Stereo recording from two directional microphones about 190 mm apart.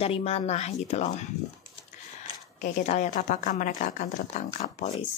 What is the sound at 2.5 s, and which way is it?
A woman's voice, 40° left (ahead or behind).